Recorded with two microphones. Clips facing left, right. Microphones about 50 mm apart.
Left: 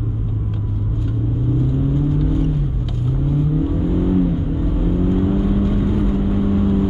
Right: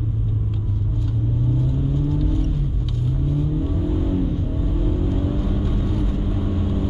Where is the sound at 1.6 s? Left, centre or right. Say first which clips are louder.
Left 4 dB; centre.